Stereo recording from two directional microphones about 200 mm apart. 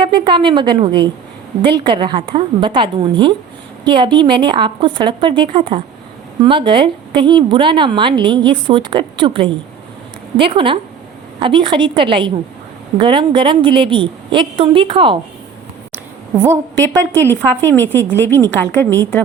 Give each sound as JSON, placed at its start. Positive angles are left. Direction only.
{"t": 0.0, "sound": "a woman's voice", "side_deg": -25}
{"t": 16.3, "sound": "a woman's voice", "side_deg": -15}
{"t": 17.2, "sound": "a woman's voice", "side_deg": 10}